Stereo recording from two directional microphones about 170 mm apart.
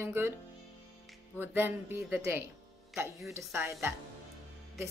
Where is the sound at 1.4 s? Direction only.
10° right (ahead or behind).